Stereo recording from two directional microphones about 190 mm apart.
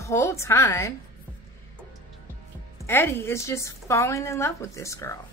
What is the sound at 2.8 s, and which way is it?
A woman's voice, 10° left (ahead or behind).